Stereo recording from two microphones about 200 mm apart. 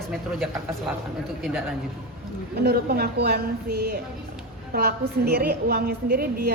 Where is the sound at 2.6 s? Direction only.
50° right (ahead or behind).